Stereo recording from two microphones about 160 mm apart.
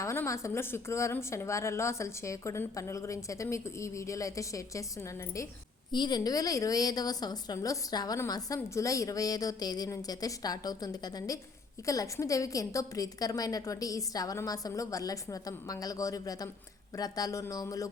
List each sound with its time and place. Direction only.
0.0 s a woman's voice: 20° left (ahead or behind)